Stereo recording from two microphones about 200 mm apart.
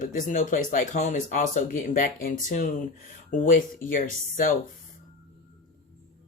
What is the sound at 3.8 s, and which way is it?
Speech, 40° left (ahead or behind).